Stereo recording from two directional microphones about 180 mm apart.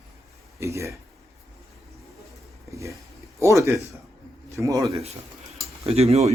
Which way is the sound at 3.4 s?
15° right (ahead or behind).